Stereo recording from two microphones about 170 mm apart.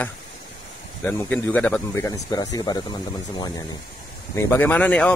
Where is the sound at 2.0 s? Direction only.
20° left (ahead or behind).